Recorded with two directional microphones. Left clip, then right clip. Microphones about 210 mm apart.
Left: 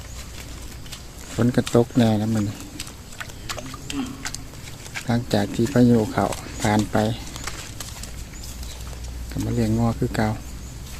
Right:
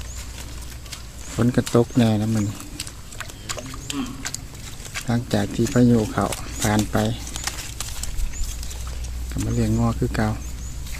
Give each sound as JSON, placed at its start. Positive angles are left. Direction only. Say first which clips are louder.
{"t": 1.4, "sound": "speech", "louder": "even", "side_deg": 0}
{"t": 3.2, "sound": "pig", "louder": "even", "side_deg": -25}
{"t": 5.0, "sound": "speech", "louder": "left 2 dB", "side_deg": 5}
{"t": 7.3, "sound": "a sound", "louder": "right 3 dB", "side_deg": -45}
{"t": 9.6, "sound": "speech", "louder": "even", "side_deg": 0}